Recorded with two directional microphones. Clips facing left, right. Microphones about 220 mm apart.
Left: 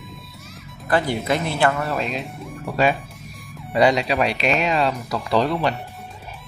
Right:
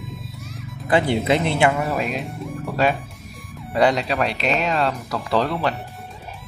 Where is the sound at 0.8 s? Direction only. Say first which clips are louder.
Right 2 dB; 25° right (ahead or behind).